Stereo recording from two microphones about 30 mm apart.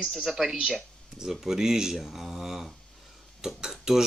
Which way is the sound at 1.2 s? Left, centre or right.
Centre.